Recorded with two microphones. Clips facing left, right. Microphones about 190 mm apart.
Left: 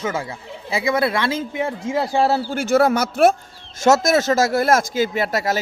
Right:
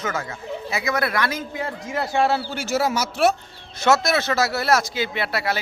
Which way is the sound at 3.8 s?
45° left (ahead or behind).